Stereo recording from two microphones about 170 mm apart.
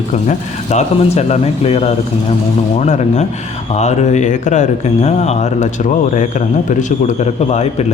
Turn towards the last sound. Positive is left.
turn(degrees=40)  # may be behind; listen again after turning